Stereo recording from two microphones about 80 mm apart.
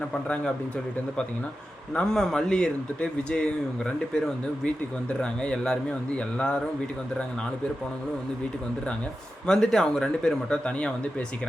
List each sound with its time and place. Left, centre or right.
0.1 s speech: centre
2.0 s speech: centre
9.5 s speech: centre